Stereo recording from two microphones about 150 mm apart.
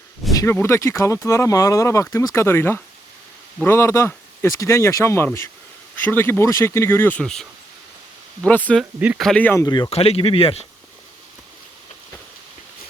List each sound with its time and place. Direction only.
0.3 s speech: 20° left (ahead or behind)
8.8 s speech: 5° right (ahead or behind)
9.2 s speech: 10° left (ahead or behind)
9.6 s speech: 25° left (ahead or behind)
9.9 s speech: 40° left (ahead or behind)